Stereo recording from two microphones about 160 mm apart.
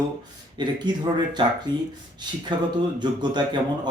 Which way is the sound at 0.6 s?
25° right (ahead or behind).